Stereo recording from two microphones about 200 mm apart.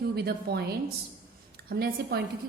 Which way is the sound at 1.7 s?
50° right (ahead or behind).